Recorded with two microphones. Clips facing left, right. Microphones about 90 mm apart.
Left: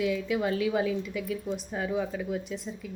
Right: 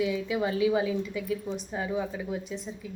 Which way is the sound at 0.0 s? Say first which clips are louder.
Even; 5° right (ahead or behind).